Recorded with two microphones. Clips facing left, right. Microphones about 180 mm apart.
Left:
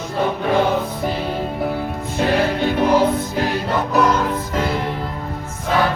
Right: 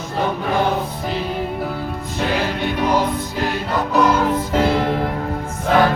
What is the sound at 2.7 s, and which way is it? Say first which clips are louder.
Music: left 3 dB; 50° left (ahead or behind).